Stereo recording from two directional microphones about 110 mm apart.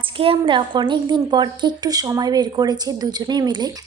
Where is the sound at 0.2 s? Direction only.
55° right (ahead or behind).